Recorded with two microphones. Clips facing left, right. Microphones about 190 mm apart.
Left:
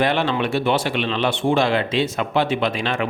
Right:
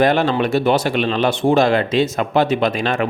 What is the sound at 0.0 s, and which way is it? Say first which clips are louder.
Speech: right 4 dB; 40° right (ahead or behind).